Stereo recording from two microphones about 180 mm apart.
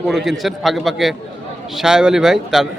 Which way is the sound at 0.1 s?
Centre (ahead or behind).